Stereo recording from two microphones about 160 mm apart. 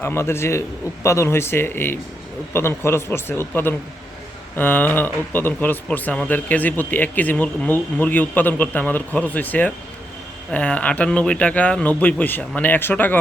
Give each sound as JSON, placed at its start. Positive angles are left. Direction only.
{"t": 0.0, "sound": "speech", "side_deg": 15}